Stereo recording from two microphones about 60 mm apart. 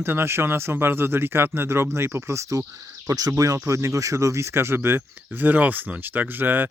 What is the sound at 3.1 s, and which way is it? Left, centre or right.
A man's voice, right.